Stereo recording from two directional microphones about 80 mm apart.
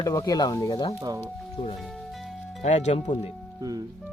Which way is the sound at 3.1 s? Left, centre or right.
Left.